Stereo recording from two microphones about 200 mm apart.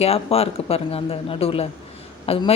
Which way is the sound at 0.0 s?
30° left (ahead or behind).